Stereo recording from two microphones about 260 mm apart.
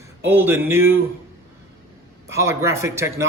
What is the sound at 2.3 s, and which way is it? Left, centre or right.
Speech, centre.